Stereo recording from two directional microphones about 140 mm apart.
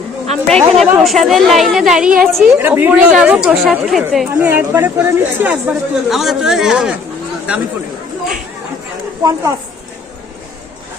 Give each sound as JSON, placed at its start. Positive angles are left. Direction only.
{"t": 0.4, "sound": "a woman's voice", "side_deg": 5}
{"t": 2.6, "sound": "a woman's voice", "side_deg": -15}
{"t": 4.4, "sound": "speech", "side_deg": -15}
{"t": 6.1, "sound": "a woman's voice", "side_deg": 0}
{"t": 9.2, "sound": "a woman's voice", "side_deg": -20}